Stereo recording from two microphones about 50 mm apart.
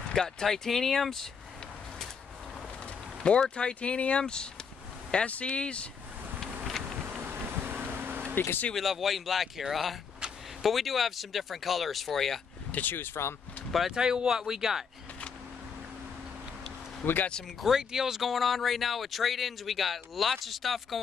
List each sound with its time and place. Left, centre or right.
0.1 s speech: centre
3.2 s speech: centre
7.2 s vehicle: right
8.4 s speech: left
8.7 s speech: centre
12.7 s speech: left
13.7 s speech: centre
13.9 s speech: centre
17.0 s speech: left
17.6 s speech: centre